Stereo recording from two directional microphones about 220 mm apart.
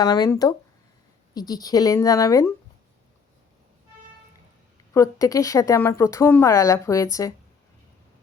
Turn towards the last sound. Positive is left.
turn(degrees=15)  # may be behind; listen again after turning